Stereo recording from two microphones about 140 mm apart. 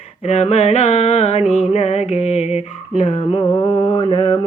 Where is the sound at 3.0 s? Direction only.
45° left (ahead or behind).